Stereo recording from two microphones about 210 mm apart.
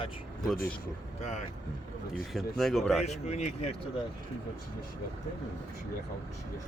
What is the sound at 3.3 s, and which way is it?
Speech, 30° left (ahead or behind).